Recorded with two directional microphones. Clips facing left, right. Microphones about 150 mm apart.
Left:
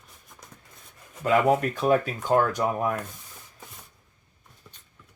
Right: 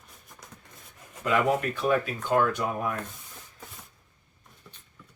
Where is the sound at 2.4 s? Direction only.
40° left (ahead or behind).